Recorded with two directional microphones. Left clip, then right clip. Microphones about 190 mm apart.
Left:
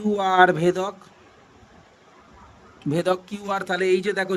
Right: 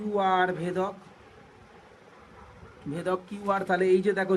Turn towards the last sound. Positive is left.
turn(degrees=65)  # may be behind; listen again after turning